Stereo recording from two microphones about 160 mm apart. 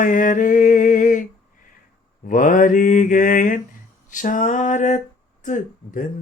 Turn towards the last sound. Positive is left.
turn(degrees=55)  # may be behind; listen again after turning